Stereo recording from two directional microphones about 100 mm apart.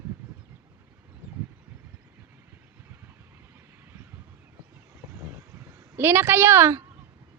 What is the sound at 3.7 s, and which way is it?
Vehicle, 20° right (ahead or behind).